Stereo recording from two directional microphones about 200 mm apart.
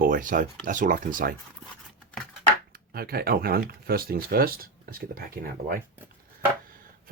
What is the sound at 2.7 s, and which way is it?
Speech, 50° right (ahead or behind).